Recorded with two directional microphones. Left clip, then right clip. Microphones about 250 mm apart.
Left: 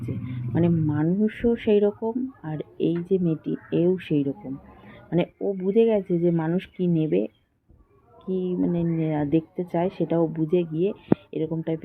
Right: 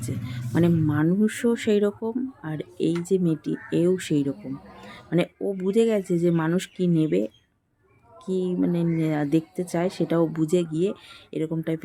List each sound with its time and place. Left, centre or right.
0.5 s speech: right